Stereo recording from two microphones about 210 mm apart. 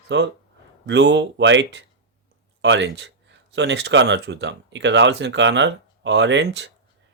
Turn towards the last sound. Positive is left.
turn(degrees=-55)  # may be behind; listen again after turning